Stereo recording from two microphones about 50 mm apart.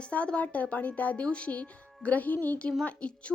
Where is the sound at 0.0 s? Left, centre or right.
Left.